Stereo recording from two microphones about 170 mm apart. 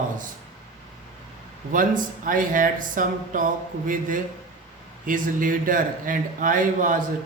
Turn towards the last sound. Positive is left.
turn(degrees=-50)  # may be behind; listen again after turning